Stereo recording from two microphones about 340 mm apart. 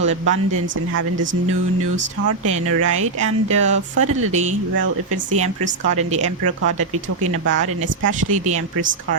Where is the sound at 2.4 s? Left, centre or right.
Right.